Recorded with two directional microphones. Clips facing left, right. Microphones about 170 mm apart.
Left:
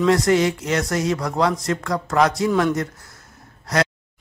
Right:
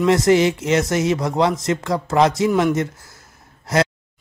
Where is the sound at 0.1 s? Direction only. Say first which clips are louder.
Right 5 dB; 25° right (ahead or behind).